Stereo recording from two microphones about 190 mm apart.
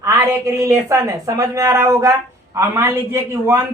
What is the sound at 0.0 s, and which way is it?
A woman's voice, 15° right (ahead or behind).